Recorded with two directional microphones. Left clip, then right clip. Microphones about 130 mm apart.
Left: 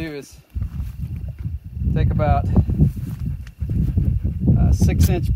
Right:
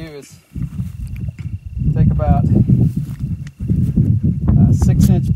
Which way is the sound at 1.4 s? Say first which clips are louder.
Right 3 dB; 5° right (ahead or behind).